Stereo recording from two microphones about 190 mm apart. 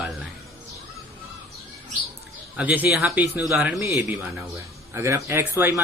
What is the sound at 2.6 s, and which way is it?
Speech, 5° right (ahead or behind).